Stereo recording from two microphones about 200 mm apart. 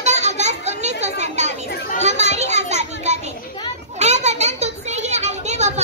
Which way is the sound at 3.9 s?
35° right (ahead or behind).